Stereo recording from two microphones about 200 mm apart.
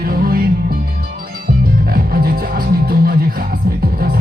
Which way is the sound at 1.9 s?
45° right (ahead or behind).